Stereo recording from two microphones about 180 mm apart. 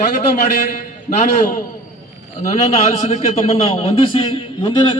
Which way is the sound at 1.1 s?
40° left (ahead or behind).